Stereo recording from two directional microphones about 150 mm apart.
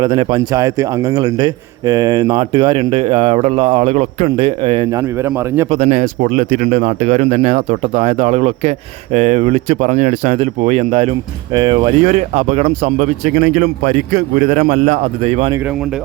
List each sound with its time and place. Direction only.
0.0 s a man's voice: 30° right (ahead or behind); by 4.3 s 50° right (ahead or behind)
4.4 s a man's voice: 35° right (ahead or behind)
4.9 s a man's voice: 20° right (ahead or behind)
5.7 s speech: 45° right (ahead or behind)
11.5 s a man's voice: 35° right (ahead or behind)